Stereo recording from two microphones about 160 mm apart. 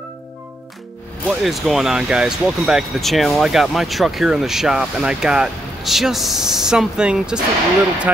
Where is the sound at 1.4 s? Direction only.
Centre (ahead or behind).